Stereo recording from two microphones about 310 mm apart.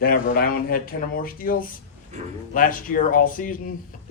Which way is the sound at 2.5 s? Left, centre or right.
Left.